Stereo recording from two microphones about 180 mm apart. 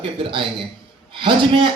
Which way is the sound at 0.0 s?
30° right (ahead or behind).